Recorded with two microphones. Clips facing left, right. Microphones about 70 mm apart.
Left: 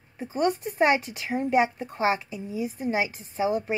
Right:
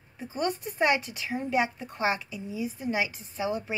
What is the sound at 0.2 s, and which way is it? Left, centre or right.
A woman's voice, left.